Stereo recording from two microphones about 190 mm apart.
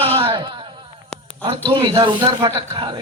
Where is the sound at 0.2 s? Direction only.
25° right (ahead or behind).